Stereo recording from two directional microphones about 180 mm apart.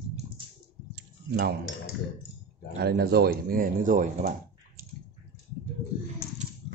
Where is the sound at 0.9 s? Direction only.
65° right (ahead or behind).